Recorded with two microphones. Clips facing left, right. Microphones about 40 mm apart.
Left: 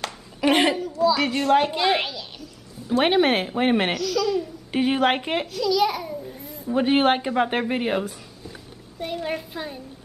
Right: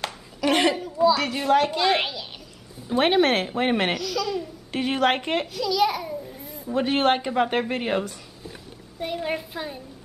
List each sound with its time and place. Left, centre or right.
0.4 s a sound: centre
1.1 s a woman's voice: centre
2.0 s a child's voice: centre
3.0 s a woman's voice: centre